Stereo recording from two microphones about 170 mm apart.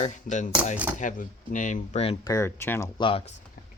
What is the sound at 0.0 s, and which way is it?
Speech, 45° left (ahead or behind).